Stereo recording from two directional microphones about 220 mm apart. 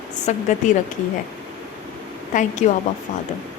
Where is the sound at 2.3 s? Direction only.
35° left (ahead or behind).